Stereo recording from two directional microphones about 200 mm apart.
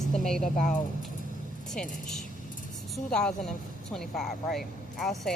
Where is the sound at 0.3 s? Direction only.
Centre (ahead or behind).